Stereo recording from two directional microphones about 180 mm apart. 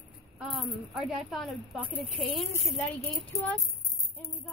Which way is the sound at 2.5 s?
15° left (ahead or behind).